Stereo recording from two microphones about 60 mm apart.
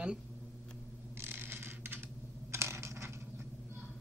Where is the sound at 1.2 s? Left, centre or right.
Right.